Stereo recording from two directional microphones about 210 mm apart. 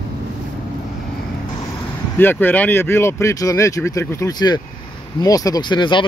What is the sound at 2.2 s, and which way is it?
Speech, 10° left (ahead or behind).